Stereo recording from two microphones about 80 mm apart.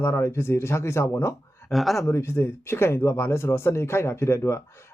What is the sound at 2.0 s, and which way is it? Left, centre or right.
Speech, left.